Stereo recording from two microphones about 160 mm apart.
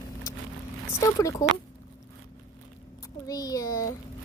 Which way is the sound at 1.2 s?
20° left (ahead or behind).